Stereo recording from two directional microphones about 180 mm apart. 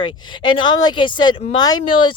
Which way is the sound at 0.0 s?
25° left (ahead or behind).